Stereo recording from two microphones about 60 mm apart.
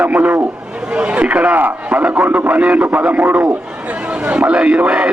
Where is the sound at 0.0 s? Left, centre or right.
Right.